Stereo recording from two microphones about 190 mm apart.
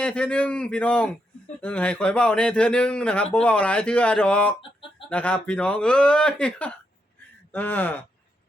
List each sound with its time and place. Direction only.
0.0 s a man's voice: 5° left (ahead or behind)
4.6 s chicken: 25° left (ahead or behind)
5.0 s a man's voice: 5° left (ahead or behind)